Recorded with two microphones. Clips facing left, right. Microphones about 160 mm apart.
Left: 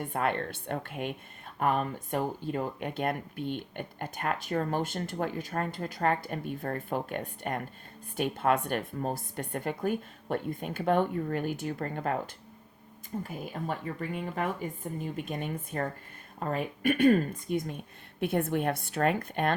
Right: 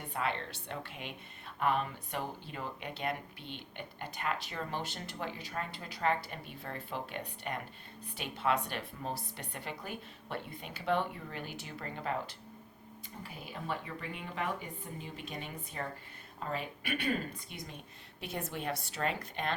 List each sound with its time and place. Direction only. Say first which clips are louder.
0.1 s speech: left 4 dB; 50° left (ahead or behind)